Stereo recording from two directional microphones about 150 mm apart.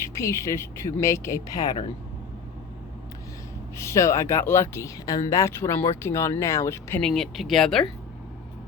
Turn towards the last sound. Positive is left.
turn(degrees=0)  # may be behind; listen again after turning